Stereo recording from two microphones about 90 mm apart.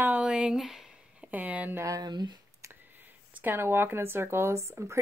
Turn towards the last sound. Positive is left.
turn(degrees=-30)  # may be behind; listen again after turning